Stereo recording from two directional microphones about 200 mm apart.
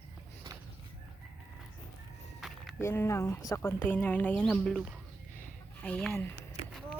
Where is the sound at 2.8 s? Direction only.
15° left (ahead or behind).